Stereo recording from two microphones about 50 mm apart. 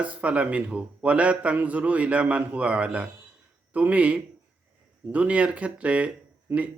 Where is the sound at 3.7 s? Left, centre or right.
Right.